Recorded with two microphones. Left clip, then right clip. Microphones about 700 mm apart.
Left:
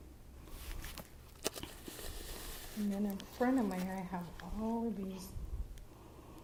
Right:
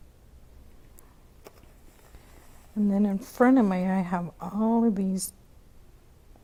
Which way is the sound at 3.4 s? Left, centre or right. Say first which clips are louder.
Right 13 dB; right.